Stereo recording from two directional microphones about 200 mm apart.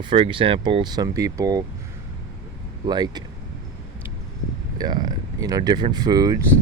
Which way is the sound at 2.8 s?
20° right (ahead or behind).